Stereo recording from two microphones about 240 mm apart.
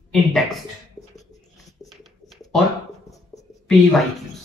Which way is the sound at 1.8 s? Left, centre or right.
Centre.